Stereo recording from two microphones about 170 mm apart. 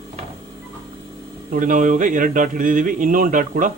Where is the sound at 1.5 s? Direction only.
50° right (ahead or behind).